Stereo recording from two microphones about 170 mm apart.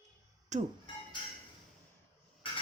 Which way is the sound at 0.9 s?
30° left (ahead or behind).